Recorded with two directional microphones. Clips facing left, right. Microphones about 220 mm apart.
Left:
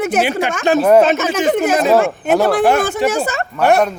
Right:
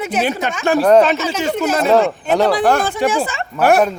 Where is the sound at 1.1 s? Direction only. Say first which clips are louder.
Left 2 dB; 50° left (ahead or behind).